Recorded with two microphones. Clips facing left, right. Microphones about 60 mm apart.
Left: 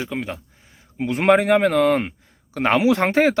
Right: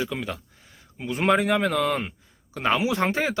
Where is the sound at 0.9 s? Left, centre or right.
Left.